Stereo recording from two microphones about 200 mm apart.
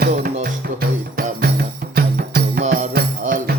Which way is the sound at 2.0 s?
50° right (ahead or behind).